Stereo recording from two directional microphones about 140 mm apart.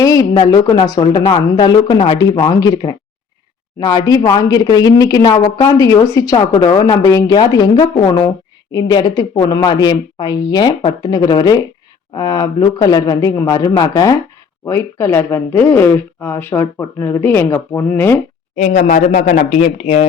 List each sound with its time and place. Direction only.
0.0 s speech: 25° left (ahead or behind)
18.5 s speech: 60° left (ahead or behind)